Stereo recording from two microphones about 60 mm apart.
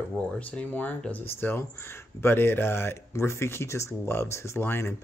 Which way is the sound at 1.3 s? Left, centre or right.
Left.